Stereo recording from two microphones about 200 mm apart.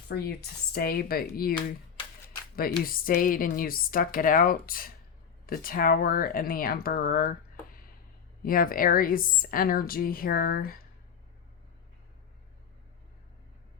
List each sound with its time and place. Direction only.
0.1 s speech: 50° left (ahead or behind)
2.6 s speech: 45° left (ahead or behind)
8.4 s speech: 45° left (ahead or behind)